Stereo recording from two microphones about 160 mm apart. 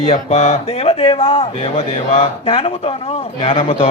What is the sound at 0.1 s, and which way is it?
A man's voice, 45° left (ahead or behind).